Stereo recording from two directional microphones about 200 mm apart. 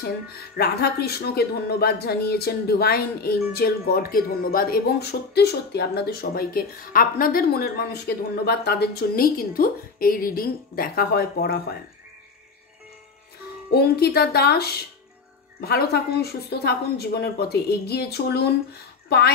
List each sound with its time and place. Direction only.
0.6 s speech: 50° left (ahead or behind)
13.7 s a woman's voice: 55° left (ahead or behind)